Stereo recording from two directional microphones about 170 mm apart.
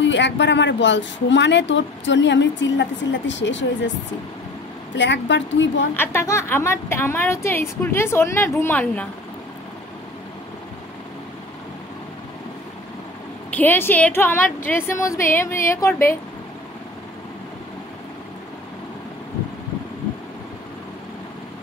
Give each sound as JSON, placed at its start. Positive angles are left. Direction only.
{"t": 0.0, "sound": "speech", "side_deg": 90}
{"t": 4.9, "sound": "speech", "side_deg": 90}
{"t": 5.9, "sound": "a woman's voice", "side_deg": 15}
{"t": 13.6, "sound": "a woman's voice", "side_deg": 10}